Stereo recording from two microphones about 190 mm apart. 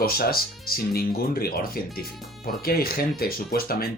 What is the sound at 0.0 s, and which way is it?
Speech, 50° left (ahead or behind).